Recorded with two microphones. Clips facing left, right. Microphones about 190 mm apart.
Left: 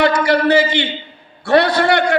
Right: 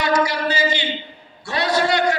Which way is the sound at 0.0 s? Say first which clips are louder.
Left 6 dB; 60° left (ahead or behind).